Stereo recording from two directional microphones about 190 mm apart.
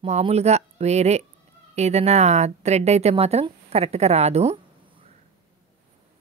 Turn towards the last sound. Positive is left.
turn(degrees=-30)  # may be behind; listen again after turning